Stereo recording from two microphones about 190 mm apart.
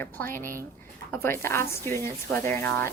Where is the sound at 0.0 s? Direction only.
10° left (ahead or behind).